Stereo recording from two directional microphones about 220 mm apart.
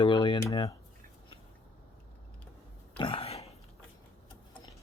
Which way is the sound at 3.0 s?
25° left (ahead or behind).